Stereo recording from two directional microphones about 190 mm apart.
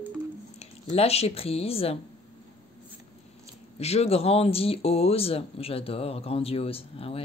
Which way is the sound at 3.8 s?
35° left (ahead or behind).